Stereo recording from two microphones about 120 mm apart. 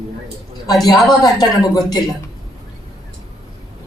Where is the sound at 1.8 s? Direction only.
35° left (ahead or behind).